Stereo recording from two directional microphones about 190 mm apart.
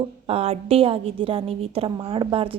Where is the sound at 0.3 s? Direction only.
30° right (ahead or behind).